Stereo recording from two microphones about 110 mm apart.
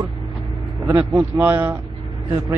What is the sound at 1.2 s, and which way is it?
Speech, 20° right (ahead or behind).